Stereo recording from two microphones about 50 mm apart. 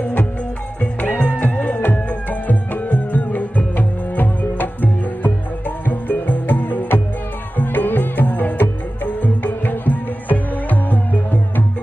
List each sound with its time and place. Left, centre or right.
0.7 s music: left